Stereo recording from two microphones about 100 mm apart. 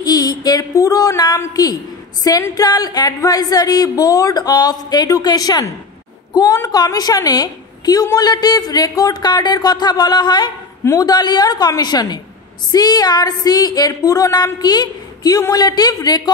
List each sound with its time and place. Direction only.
0.0 s a sound: 40° left (ahead or behind)
1.5 s a woman's voice: 40° left (ahead or behind)
10.8 s a man's voice: 30° left (ahead or behind)
11.1 s a woman's voice: 45° left (ahead or behind)